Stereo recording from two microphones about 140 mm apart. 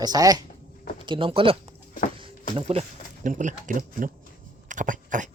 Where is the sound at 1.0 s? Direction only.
40° right (ahead or behind).